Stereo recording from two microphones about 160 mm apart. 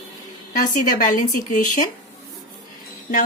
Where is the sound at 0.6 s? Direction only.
55° left (ahead or behind).